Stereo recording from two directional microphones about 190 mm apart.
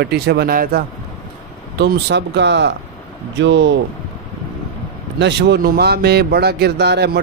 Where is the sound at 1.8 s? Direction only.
60° right (ahead or behind).